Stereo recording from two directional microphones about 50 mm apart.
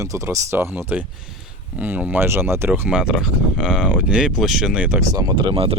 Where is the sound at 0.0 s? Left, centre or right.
Right.